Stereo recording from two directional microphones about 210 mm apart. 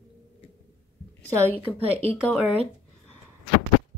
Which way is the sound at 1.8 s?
30° right (ahead or behind).